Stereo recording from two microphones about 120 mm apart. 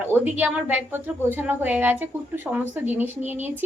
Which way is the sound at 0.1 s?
15° right (ahead or behind).